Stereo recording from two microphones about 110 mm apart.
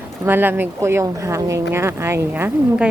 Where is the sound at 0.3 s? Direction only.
20° right (ahead or behind).